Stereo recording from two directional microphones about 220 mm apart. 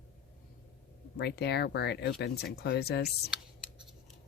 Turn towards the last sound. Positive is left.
turn(degrees=45)  # may be behind; listen again after turning